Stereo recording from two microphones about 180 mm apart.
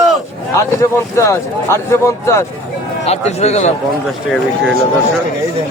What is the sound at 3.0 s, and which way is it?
Speech, 40° left (ahead or behind).